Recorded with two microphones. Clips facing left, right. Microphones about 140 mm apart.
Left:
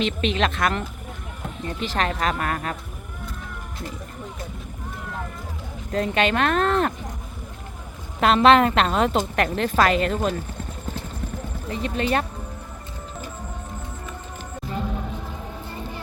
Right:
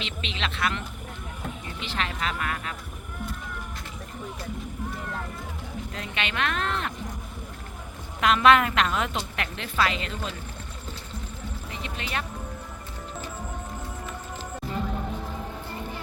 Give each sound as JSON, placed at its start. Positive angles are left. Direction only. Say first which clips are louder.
{"t": 0.0, "sound": "a woman's voice", "louder": "left 11 dB", "side_deg": 45}
{"t": 5.9, "sound": "speech", "louder": "left 13 dB", "side_deg": 40}
{"t": 8.2, "sound": "a woman's voice", "louder": "left 4 dB", "side_deg": 30}
{"t": 11.7, "sound": "speech", "louder": "left 11 dB", "side_deg": 40}